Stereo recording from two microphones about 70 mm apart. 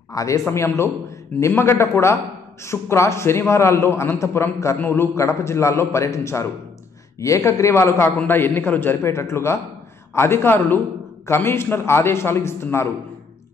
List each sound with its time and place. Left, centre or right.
0.1 s a man's voice: left
0.5 s a man's voice: left